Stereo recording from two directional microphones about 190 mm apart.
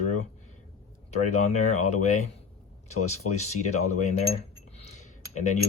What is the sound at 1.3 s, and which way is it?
Speech, 40° left (ahead or behind).